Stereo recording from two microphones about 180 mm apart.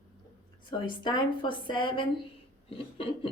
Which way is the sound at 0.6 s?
25° left (ahead or behind).